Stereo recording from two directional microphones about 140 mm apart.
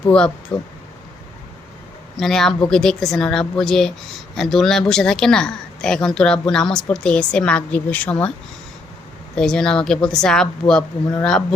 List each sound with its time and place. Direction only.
0.5 s speech: 35° left (ahead or behind)
2.1 s speech: centre (ahead or behind)
9.3 s speech: 5° left (ahead or behind)